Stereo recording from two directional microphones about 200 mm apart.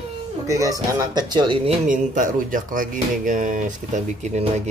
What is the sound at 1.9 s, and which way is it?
Speech, 40° right (ahead or behind).